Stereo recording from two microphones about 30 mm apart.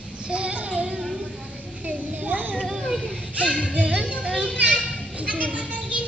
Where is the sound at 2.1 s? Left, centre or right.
Right.